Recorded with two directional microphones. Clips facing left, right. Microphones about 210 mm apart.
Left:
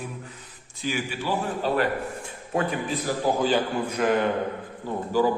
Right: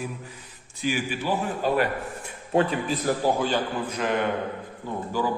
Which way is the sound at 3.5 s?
10° left (ahead or behind).